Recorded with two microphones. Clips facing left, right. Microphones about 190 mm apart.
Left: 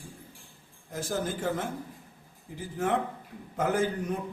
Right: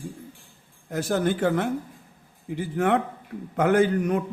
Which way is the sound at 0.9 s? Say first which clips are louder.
Right 8 dB; 70° right (ahead or behind).